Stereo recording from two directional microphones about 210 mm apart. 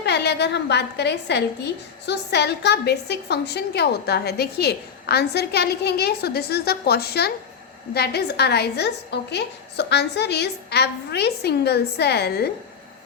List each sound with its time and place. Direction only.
0.0 s a woman's voice: 50° left (ahead or behind)